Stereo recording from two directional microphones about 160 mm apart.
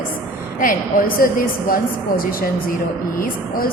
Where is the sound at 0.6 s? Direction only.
60° left (ahead or behind).